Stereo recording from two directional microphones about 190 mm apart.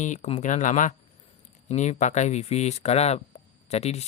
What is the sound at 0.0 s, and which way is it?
Speech, 40° left (ahead or behind).